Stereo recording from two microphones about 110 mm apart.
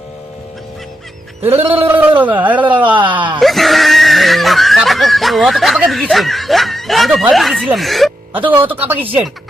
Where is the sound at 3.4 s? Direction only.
Centre (ahead or behind).